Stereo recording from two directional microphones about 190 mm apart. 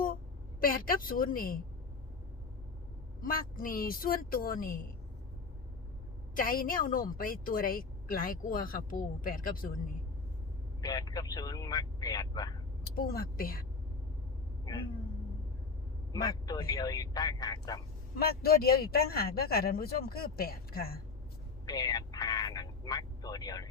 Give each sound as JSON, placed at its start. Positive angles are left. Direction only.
{"t": 0.6, "sound": "speech", "side_deg": 50}
{"t": 3.2, "sound": "speech", "side_deg": 50}
{"t": 6.3, "sound": "speech", "side_deg": 50}
{"t": 10.8, "sound": "speech", "side_deg": 20}
{"t": 13.0, "sound": "speech", "side_deg": 50}
{"t": 14.6, "sound": "a sound", "side_deg": 20}
{"t": 16.1, "sound": "speech", "side_deg": 20}
{"t": 18.2, "sound": "speech", "side_deg": 55}
{"t": 21.7, "sound": "speech", "side_deg": 20}